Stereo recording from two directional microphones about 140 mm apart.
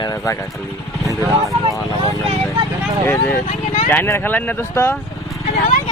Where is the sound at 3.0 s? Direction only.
20° left (ahead or behind).